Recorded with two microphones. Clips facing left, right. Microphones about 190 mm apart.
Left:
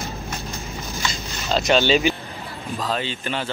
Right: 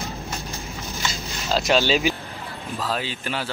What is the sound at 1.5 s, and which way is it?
Speech, centre (ahead or behind).